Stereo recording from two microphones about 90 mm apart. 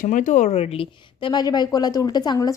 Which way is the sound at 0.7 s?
80° left.